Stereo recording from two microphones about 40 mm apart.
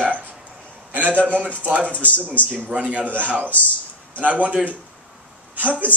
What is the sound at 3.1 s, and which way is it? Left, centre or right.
A man's voice, right.